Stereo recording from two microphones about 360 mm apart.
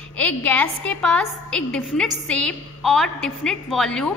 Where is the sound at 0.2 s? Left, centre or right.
Centre.